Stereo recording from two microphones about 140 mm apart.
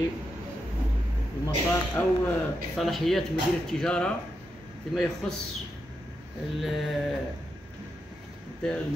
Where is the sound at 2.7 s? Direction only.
Centre (ahead or behind).